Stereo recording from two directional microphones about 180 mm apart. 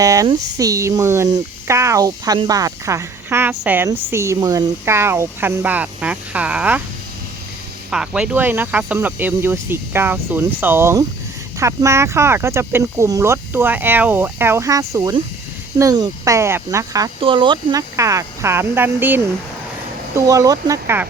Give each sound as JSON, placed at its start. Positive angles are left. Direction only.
{"t": 0.0, "sound": "speech", "side_deg": -20}
{"t": 7.9, "sound": "speech", "side_deg": -5}
{"t": 17.2, "sound": "speech", "side_deg": -30}